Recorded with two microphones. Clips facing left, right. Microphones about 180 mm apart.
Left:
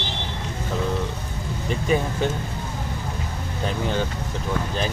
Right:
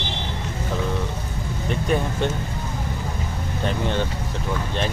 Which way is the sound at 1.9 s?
5° left (ahead or behind).